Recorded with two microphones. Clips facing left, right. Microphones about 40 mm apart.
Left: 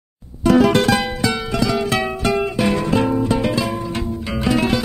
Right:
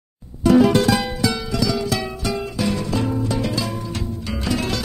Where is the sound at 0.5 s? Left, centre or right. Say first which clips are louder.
Left 1 dB; left.